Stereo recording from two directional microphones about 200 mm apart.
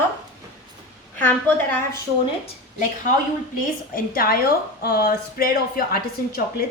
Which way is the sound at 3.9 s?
45° left (ahead or behind).